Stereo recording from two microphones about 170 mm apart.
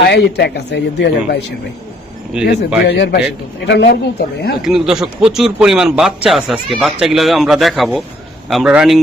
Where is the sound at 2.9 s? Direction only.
70° left (ahead or behind).